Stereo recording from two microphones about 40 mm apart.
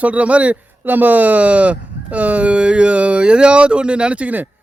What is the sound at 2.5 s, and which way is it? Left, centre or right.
Speech, right.